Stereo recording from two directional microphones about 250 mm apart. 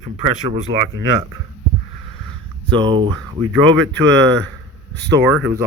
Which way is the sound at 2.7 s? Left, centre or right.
Centre.